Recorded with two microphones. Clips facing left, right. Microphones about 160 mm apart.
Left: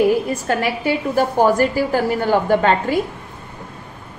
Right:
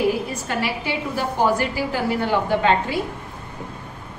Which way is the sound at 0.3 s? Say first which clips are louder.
Left 5 dB; 50° left (ahead or behind).